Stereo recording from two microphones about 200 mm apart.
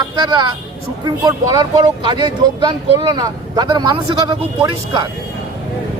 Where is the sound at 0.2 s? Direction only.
20° right (ahead or behind).